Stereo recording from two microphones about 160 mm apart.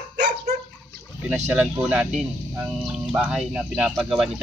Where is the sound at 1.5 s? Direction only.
5° right (ahead or behind).